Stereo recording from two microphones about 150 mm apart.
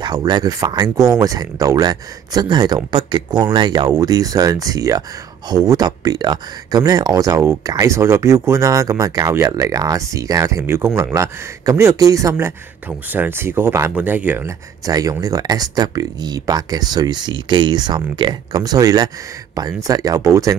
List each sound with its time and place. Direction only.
0.0 s speech: 25° right (ahead or behind)
14.9 s speech: 25° right (ahead or behind)